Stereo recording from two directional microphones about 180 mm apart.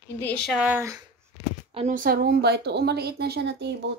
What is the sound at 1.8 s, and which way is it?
Speech, 45° right (ahead or behind).